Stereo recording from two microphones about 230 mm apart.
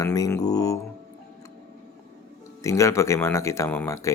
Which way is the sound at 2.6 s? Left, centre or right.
Centre.